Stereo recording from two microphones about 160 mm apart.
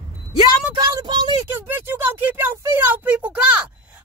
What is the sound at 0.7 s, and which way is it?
Speech, 25° right (ahead or behind).